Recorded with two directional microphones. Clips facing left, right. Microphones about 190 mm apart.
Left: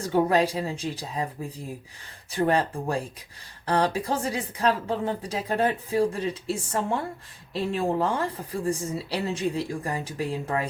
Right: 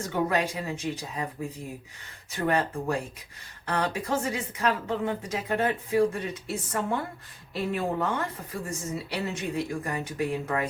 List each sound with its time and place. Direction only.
0.0 s a woman's voice: 30° left (ahead or behind)
2.3 s a woman's voice: 30° left (ahead or behind)